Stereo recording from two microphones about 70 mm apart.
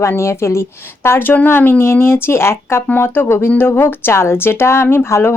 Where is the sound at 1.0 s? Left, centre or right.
Left.